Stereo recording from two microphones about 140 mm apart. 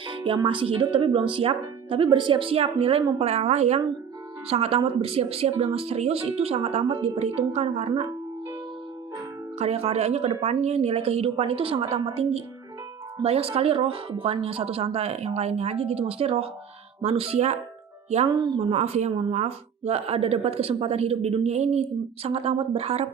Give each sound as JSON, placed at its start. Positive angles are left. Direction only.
{"t": 0.1, "sound": "music", "side_deg": -35}
{"t": 0.4, "sound": "speech", "side_deg": -40}
{"t": 9.6, "sound": "speech", "side_deg": -50}
{"t": 18.3, "sound": "a woman's voice", "side_deg": -30}
{"t": 18.6, "sound": "speech", "side_deg": -50}